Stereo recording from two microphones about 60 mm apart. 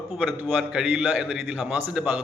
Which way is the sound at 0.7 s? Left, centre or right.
Centre.